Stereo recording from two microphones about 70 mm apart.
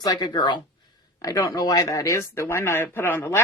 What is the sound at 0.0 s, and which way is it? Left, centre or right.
Speech, left.